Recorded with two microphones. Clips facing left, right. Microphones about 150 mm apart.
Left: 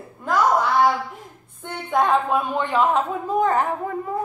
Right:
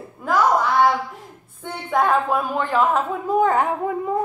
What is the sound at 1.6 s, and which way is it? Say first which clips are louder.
A woman's voice: even; 5° right (ahead or behind).